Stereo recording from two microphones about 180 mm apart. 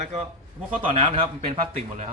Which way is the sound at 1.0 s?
30° right (ahead or behind).